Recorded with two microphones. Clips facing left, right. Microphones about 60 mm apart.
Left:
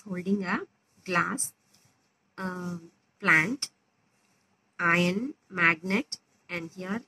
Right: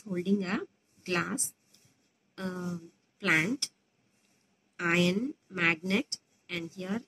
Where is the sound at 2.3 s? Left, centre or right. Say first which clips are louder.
Left 2 dB; left.